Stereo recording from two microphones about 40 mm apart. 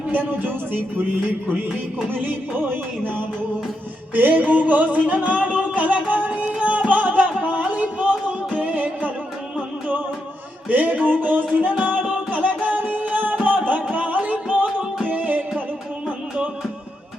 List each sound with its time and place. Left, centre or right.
0.1 s music: right
2.2 s music: right
7.4 s a sound: right
8.5 s music: right
11.0 s a sound: right
11.8 s music: right